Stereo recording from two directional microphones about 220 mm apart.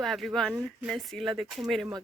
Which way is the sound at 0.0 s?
Centre (ahead or behind).